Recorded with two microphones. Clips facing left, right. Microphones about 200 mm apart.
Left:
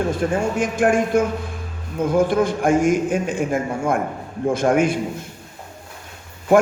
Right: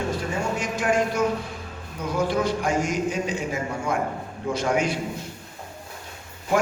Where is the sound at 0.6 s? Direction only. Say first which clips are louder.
Left 5 dB; 50° left (ahead or behind).